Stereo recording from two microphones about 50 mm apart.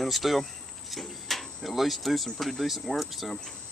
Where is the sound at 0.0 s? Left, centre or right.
Centre.